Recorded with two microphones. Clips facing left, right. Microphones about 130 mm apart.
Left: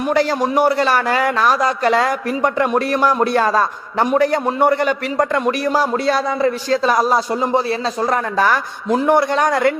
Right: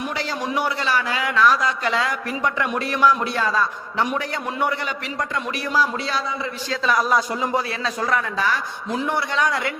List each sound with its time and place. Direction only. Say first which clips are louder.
0.1 s a man's voice: left 9 dB; 50° left (ahead or behind)
8.4 s a man's voice: left 7 dB; 50° left (ahead or behind)